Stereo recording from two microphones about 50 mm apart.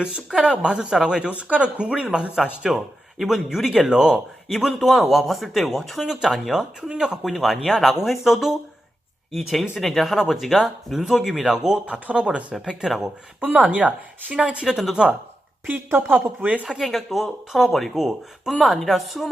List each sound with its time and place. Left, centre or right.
0.2 s speech: centre
0.4 s speech: centre
2.3 s speech: centre
3.8 s speech: centre
4.5 s speech: centre
6.1 s speech: centre
11.9 s speech: right
15.7 s speech: right
16.6 s speech: centre